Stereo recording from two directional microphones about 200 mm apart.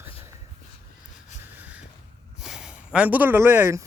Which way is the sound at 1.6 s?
5° right (ahead or behind).